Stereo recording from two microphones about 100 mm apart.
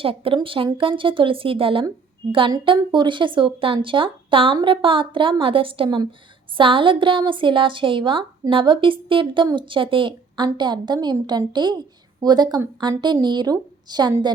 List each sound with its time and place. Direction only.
0.0 s a woman's voice: 65° right (ahead or behind); by 14.1 s 45° right (ahead or behind)